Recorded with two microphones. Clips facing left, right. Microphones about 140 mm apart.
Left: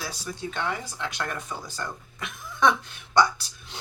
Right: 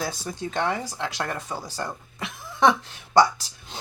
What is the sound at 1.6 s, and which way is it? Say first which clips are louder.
Speech: right 3 dB; 30° right (ahead or behind).